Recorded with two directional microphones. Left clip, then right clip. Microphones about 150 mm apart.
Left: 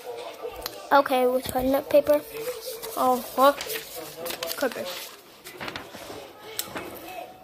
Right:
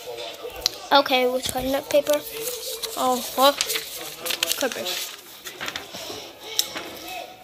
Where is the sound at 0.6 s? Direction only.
Centre (ahead or behind).